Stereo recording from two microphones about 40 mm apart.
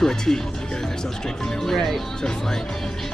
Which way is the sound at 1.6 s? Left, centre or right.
Centre.